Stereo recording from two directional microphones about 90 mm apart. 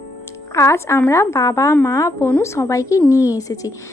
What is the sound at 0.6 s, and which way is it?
A woman's voice, 30° left (ahead or behind).